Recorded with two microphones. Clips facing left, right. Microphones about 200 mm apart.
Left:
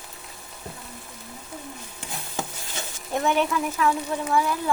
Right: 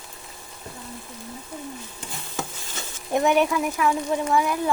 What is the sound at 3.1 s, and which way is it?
Speech, 15° right (ahead or behind).